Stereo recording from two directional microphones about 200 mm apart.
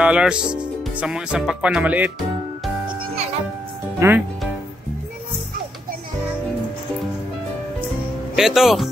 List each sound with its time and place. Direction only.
0.0 s speech: 5° right (ahead or behind)
4.0 s speech: 15° right (ahead or behind)
8.4 s speech: centre (ahead or behind)